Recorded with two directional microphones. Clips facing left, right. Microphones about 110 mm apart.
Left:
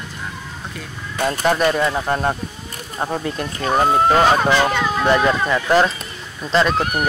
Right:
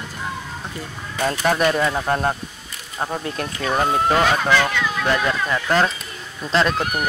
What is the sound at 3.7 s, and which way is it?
Speech, 25° left (ahead or behind).